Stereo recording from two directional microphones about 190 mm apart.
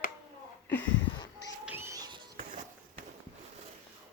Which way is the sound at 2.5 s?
45° right (ahead or behind).